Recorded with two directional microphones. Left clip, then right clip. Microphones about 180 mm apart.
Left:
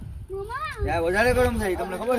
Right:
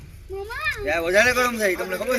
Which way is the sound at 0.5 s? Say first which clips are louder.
Right 4 dB; 65° left (ahead or behind).